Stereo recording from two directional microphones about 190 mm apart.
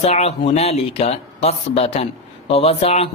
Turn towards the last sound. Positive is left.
turn(degrees=30)  # may be behind; listen again after turning